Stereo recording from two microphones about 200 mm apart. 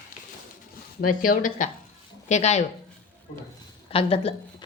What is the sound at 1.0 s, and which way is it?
A woman's voice, 45° left (ahead or behind).